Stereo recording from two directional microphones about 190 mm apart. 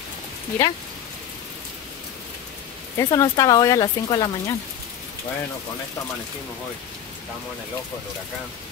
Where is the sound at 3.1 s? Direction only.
20° left (ahead or behind).